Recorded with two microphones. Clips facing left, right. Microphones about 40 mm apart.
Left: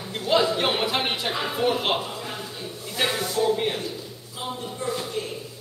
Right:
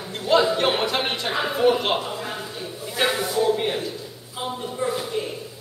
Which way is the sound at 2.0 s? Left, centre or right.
Centre.